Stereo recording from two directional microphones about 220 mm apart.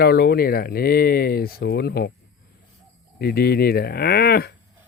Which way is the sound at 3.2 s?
45° left (ahead or behind).